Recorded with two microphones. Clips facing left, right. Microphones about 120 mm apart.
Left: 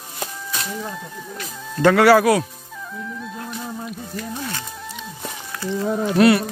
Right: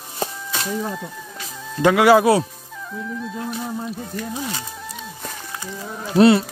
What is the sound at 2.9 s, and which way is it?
Music, centre (ahead or behind).